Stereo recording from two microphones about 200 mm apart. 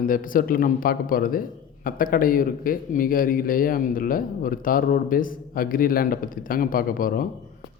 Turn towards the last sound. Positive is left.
turn(degrees=45)  # may be behind; listen again after turning